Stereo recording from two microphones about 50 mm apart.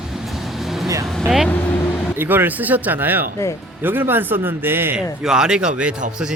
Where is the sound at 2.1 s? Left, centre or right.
Right.